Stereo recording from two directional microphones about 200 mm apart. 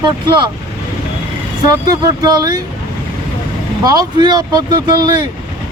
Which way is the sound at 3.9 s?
20° right (ahead or behind).